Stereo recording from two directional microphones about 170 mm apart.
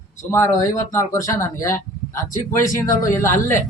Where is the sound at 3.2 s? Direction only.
15° left (ahead or behind).